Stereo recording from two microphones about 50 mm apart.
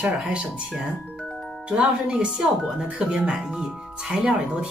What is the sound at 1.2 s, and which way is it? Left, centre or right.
Music, centre.